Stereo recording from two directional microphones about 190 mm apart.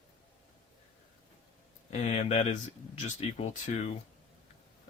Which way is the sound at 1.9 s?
35° left (ahead or behind).